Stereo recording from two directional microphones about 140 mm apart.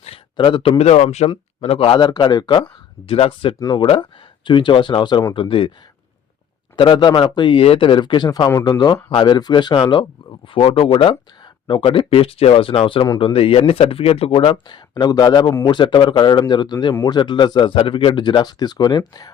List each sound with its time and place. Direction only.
0.0 s speech: 40° left (ahead or behind)
2.0 s speech: 30° left (ahead or behind)
3.1 s speech: 40° left (ahead or behind)
3.6 s speech: 25° left (ahead or behind)
3.8 s speech: 40° left (ahead or behind)
6.7 s speech: 35° left (ahead or behind)